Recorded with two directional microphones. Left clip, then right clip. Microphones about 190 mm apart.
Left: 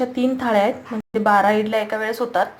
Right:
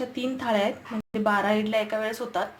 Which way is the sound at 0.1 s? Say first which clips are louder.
Left 7 dB; 10° left (ahead or behind).